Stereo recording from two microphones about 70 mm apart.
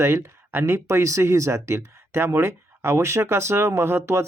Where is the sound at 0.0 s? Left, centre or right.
Right.